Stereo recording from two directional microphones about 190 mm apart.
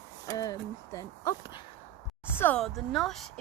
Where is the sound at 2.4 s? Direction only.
5° left (ahead or behind).